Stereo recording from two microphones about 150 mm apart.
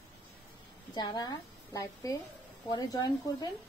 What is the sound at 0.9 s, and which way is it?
Speech, 30° left (ahead or behind).